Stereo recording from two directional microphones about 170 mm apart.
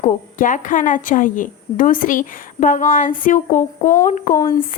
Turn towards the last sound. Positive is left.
turn(degrees=45)  # may be behind; listen again after turning